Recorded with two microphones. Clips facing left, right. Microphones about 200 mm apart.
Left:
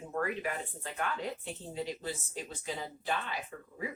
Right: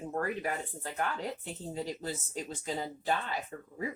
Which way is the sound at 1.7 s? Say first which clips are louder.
Right 1 dB; 40° right (ahead or behind).